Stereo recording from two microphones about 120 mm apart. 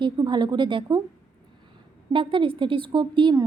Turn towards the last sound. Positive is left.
turn(degrees=-40)  # may be behind; listen again after turning